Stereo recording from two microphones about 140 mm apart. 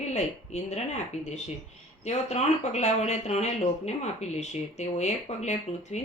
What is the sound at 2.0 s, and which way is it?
Speech, 50° left (ahead or behind).